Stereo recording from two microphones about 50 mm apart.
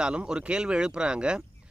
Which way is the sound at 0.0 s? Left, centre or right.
Centre.